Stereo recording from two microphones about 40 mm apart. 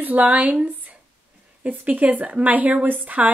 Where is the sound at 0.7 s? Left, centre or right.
Right.